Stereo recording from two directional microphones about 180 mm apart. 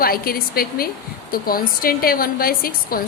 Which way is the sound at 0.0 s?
55° left (ahead or behind).